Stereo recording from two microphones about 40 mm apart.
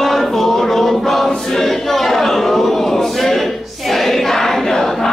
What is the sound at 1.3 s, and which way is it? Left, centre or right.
Choir, centre.